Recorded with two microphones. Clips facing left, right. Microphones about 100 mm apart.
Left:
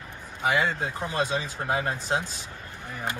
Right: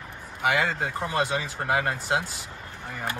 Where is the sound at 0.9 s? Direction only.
20° right (ahead or behind).